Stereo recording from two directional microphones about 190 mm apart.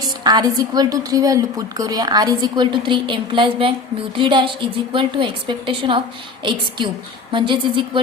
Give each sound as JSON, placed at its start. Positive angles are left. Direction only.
{"t": 0.0, "sound": "a woman's voice", "side_deg": -20}